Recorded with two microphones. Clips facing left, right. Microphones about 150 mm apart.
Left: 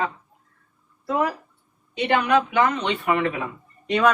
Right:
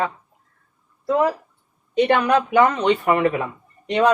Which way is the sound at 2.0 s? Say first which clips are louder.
Even; 45° right (ahead or behind).